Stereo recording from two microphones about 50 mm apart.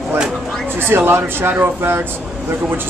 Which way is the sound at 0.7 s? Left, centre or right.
Right.